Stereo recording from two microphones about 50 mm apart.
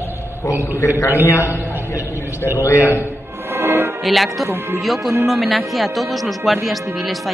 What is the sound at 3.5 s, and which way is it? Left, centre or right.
Music, right.